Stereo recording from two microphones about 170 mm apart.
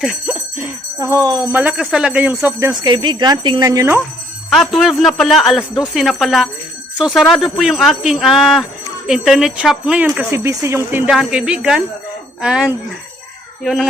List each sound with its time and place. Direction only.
0.0 s a sound: 5° right (ahead or behind)
0.9 s speech: 20° right (ahead or behind)
1.5 s speech: 5° right (ahead or behind)
2.8 s speech: 30° right (ahead or behind)
4.4 s speech: centre (ahead or behind)